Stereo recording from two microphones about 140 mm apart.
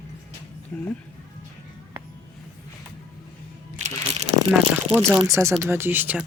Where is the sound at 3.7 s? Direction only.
55° right (ahead or behind).